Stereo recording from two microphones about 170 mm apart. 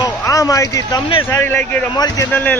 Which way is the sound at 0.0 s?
20° left (ahead or behind).